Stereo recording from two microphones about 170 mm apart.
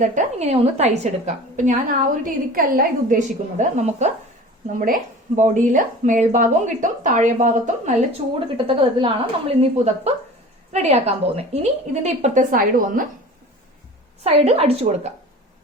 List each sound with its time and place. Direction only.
0.0 s a woman's voice: 45° right (ahead or behind)
5.4 s a woman's voice: 50° right (ahead or behind)
8.5 s a woman's voice: 30° right (ahead or behind); by 13.1 s 55° right (ahead or behind)
14.3 s a woman's voice: 40° right (ahead or behind)